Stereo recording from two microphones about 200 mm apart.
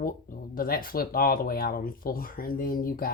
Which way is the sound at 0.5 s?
45° left (ahead or behind).